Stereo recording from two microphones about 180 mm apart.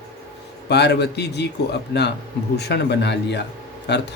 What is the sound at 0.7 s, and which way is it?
Speech, 70° left (ahead or behind).